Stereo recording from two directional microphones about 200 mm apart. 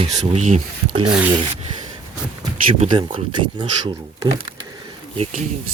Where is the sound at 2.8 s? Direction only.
25° right (ahead or behind).